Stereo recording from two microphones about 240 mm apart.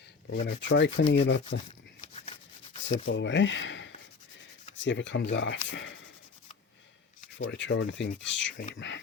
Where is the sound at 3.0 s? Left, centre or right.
Left.